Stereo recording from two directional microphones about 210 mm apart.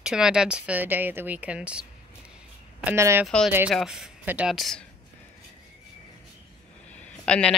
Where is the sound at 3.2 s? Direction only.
Centre (ahead or behind).